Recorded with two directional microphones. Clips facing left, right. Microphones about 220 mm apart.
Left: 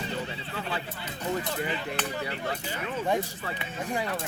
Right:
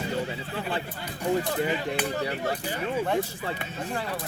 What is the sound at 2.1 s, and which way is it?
Speech, 45° right (ahead or behind).